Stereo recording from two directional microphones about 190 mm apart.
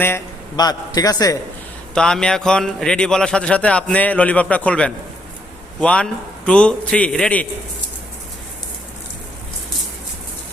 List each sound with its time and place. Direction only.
0.0 s speech: 15° left (ahead or behind)
2.0 s a man's voice: 5° left (ahead or behind)